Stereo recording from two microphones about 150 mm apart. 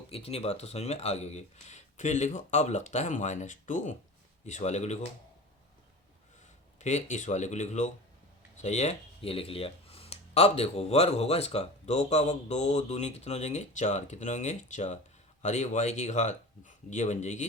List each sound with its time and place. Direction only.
0.1 s speech: 40° left (ahead or behind)
6.7 s speech: 50° left (ahead or behind)